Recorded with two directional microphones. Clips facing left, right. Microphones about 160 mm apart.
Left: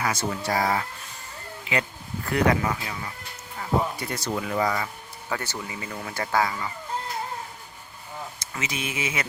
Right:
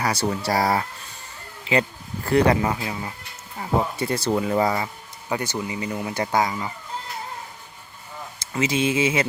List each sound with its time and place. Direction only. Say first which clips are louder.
0.0 s speech: right 3 dB; 35° right (ahead or behind)
2.2 s speech: right 4 dB; 30° right (ahead or behind)
5.3 s speech: right 5 dB; 15° right (ahead or behind)
8.4 s speech: right 12 dB; 30° right (ahead or behind)